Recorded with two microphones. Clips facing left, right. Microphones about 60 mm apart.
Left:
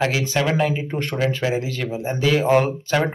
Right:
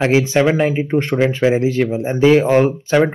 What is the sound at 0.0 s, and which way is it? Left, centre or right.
Speech, right.